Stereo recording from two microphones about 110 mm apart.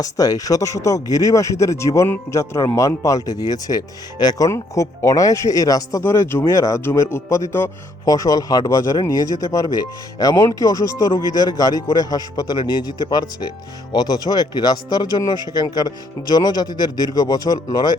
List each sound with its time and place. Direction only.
0.0 s a man's voice: 35° left (ahead or behind)
6.0 s a man's voice: 20° left (ahead or behind)